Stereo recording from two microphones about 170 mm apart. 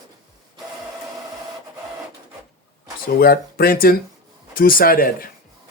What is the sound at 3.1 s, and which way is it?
Speech, 60° left (ahead or behind).